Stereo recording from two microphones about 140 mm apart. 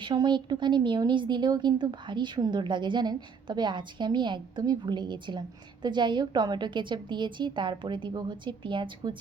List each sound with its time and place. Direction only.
0.0 s speech: 30° right (ahead or behind)